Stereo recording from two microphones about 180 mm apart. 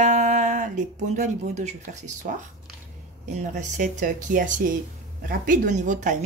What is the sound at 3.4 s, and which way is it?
Speech, 45° right (ahead or behind).